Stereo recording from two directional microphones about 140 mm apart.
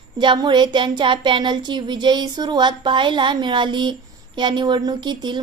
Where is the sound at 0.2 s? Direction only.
35° right (ahead or behind).